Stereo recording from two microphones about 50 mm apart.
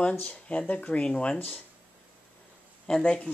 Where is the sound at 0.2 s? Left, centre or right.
Left.